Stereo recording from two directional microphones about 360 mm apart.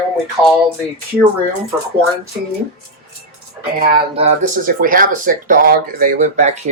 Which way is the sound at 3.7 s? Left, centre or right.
Centre.